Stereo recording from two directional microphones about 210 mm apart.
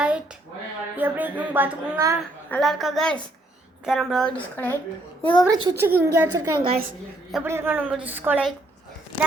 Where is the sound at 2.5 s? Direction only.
Centre (ahead or behind).